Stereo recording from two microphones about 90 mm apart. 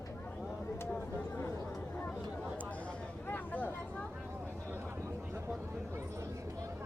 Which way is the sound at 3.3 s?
15° left (ahead or behind).